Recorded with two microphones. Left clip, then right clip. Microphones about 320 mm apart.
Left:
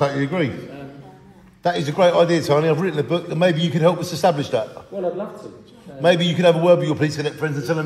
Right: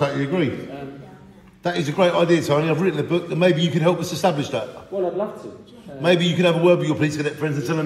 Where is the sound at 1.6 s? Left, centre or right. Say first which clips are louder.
Left 3 dB; left.